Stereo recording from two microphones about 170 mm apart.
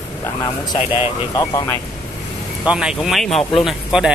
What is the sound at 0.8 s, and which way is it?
Speech, 35° left (ahead or behind).